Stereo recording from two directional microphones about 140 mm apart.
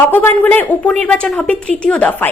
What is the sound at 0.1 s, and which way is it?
A woman's voice, 15° left (ahead or behind).